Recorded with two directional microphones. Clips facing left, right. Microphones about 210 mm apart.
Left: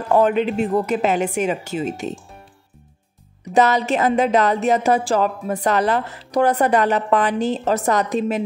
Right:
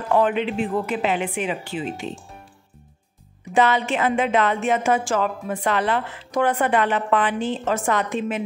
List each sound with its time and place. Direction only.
0.1 s a woman's voice: 40° left (ahead or behind)
3.5 s speech: 40° left (ahead or behind)